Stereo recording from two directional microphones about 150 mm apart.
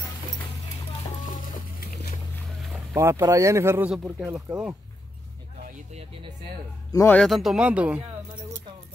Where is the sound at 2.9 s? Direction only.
15° right (ahead or behind).